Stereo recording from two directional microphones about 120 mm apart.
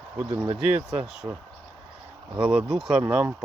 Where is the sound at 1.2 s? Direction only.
30° right (ahead or behind).